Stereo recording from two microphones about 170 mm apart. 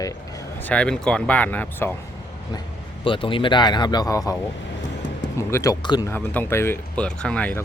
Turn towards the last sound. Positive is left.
turn(degrees=10)  # may be behind; listen again after turning